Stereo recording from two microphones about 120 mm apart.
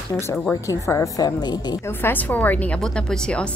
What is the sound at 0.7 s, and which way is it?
A woman's voice, 25° left (ahead or behind).